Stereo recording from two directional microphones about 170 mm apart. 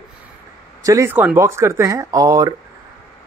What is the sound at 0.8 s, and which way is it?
Speech, 15° right (ahead or behind).